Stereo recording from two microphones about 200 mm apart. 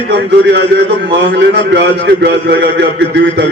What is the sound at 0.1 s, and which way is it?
A man's voice, 55° right (ahead or behind).